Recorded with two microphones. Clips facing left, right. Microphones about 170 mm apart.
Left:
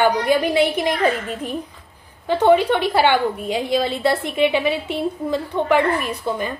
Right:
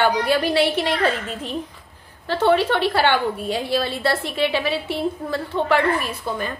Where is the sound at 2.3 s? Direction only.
15° left (ahead or behind).